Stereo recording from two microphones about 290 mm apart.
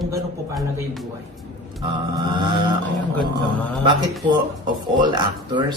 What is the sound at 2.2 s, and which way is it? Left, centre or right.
Speech, centre.